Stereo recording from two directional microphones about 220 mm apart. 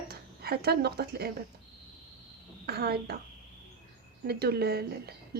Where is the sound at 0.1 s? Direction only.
45° right (ahead or behind).